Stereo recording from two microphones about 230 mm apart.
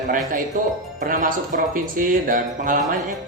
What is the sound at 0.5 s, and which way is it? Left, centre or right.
Speech, right.